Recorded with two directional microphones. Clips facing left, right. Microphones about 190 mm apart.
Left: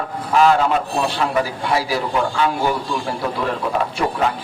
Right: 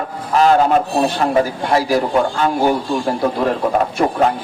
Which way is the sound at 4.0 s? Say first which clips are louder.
Right 5 dB; 45° right (ahead or behind).